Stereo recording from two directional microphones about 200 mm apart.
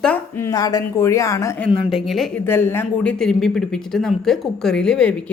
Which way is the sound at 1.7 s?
Centre (ahead or behind).